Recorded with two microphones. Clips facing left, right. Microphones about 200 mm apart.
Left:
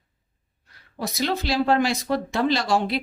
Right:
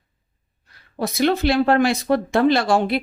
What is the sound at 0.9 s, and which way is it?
Speech, 55° right (ahead or behind).